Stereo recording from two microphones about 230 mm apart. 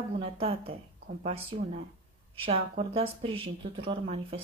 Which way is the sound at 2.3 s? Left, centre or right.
Right.